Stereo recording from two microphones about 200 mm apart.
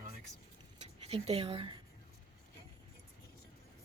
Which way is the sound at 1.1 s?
30° right (ahead or behind).